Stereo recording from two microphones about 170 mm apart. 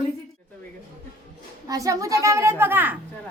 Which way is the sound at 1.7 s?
20° right (ahead or behind).